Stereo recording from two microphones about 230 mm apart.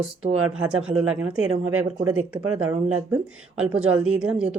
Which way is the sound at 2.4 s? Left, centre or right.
Right.